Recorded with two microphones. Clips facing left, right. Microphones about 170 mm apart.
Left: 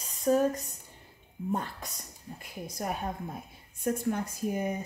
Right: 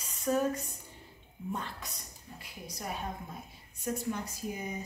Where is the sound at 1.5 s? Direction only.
45° left (ahead or behind).